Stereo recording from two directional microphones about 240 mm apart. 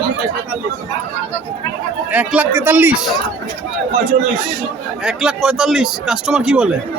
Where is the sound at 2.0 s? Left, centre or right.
Centre.